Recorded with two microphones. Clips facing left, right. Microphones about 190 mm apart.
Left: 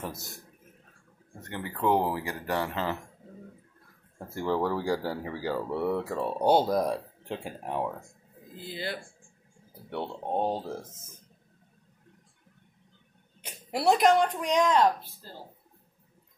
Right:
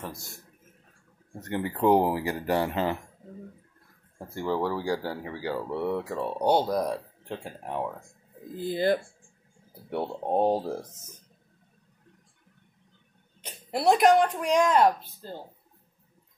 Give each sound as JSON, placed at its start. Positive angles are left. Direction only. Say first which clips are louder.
{"t": 1.8, "sound": "speech", "louder": "right 4 dB", "side_deg": -15}
{"t": 4.5, "sound": "speech", "louder": "even", "side_deg": -10}
{"t": 5.0, "sound": "speech", "louder": "left 1 dB", "side_deg": 10}
{"t": 5.3, "sound": "speech", "louder": "even", "side_deg": -15}
{"t": 5.7, "sound": "speech", "louder": "even", "side_deg": 0}
{"t": 8.5, "sound": "speech", "louder": "right 11 dB", "side_deg": -50}
{"t": 9.8, "sound": "speech", "louder": "right 4 dB", "side_deg": -30}
{"t": 13.5, "sound": "a sound", "louder": "right 1 dB", "side_deg": 10}
{"t": 13.8, "sound": "speech", "louder": "right 2 dB", "side_deg": 0}